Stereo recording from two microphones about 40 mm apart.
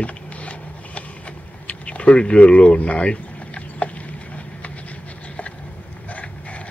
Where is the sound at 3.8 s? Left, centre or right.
Left.